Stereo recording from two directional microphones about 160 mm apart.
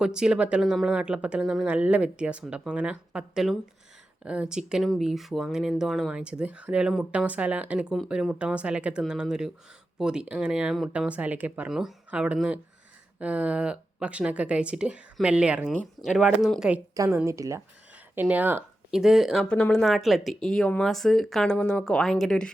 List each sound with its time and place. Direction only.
0.0 s speech: 5° right (ahead or behind)
16.9 s a woman's voice: 20° right (ahead or behind); by 22.5 s 5° left (ahead or behind)